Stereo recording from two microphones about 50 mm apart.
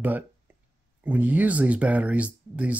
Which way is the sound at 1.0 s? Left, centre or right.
Right.